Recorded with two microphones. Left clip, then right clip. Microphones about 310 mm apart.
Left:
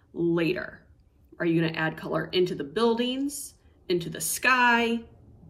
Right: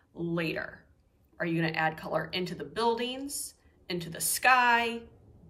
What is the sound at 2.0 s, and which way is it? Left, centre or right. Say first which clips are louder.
Speech: left 6 dB; right.